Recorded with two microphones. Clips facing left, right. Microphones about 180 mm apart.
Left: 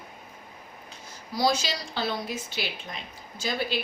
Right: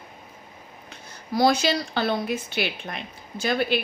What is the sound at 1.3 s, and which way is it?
Speech, 55° right (ahead or behind).